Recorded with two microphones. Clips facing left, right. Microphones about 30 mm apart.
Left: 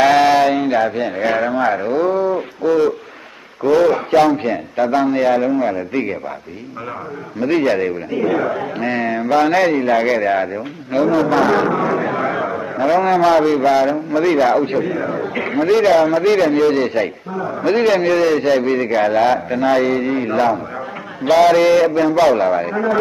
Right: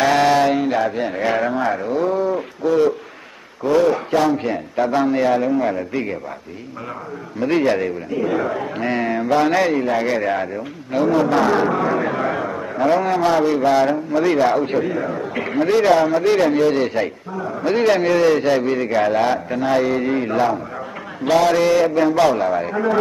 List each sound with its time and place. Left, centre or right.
0.0 s a man's voice: centre
7.3 s a man's voice: centre; by 13.7 s left
13.7 s a man's voice: centre